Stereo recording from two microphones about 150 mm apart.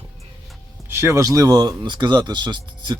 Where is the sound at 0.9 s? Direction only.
15° right (ahead or behind).